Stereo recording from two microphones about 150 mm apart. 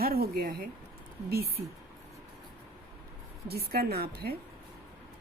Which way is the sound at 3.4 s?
90° right.